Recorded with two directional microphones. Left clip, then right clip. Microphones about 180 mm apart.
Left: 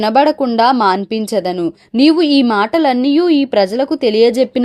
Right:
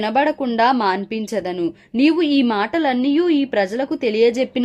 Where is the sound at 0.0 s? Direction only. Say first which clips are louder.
Left 6 dB; 30° left (ahead or behind).